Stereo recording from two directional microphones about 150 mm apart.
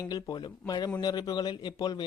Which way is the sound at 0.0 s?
25° left (ahead or behind).